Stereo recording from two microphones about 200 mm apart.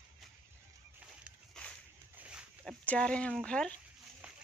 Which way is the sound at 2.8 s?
5° left (ahead or behind).